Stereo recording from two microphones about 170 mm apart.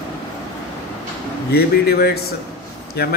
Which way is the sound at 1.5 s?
70° left (ahead or behind).